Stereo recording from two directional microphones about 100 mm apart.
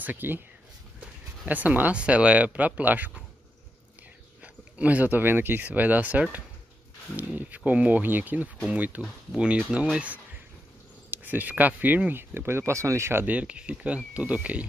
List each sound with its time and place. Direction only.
0.0 s speech: 20° right (ahead or behind)
4.4 s speech: 15° right (ahead or behind)